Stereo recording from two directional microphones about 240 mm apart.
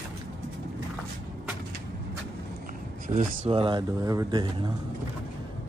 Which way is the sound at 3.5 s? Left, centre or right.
Right.